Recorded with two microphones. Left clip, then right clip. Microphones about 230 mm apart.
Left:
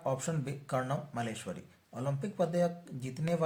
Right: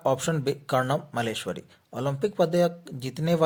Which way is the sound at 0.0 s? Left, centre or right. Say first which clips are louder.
Right 10 dB; right.